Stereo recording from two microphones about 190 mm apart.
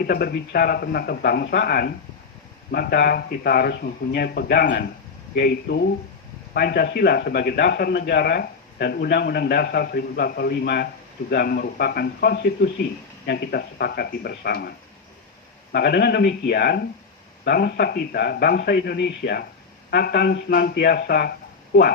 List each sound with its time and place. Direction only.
0.0 s a man's voice: 55° left (ahead or behind)
15.7 s a man's voice: 55° left (ahead or behind)